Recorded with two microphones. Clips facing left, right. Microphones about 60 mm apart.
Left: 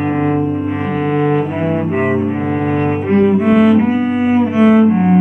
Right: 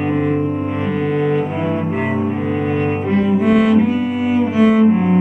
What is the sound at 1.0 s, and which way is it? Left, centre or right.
Double bass, left.